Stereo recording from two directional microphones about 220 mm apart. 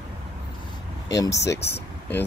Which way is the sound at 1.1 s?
15° left (ahead or behind).